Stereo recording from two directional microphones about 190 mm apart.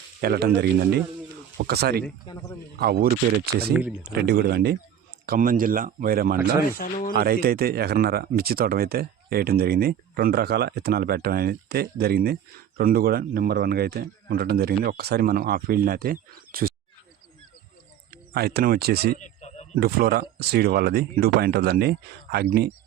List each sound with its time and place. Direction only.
0.2 s speech: 55° right (ahead or behind)
18.1 s speech: 55° right (ahead or behind)
19.2 s a sound: 35° left (ahead or behind)
19.7 s speech: 55° right (ahead or behind)